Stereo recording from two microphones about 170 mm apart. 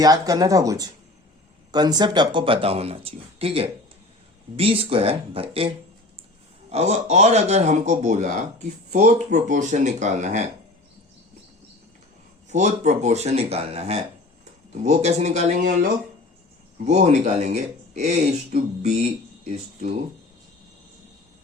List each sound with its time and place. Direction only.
0.0 s speech: 20° right (ahead or behind); by 10.4 s 45° right (ahead or behind)
12.5 s speech: 45° right (ahead or behind)